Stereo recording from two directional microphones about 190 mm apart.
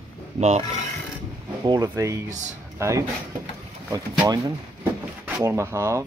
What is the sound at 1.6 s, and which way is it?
Speech, 20° right (ahead or behind).